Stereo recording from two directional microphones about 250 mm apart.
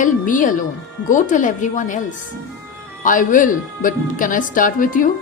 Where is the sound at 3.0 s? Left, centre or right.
Left.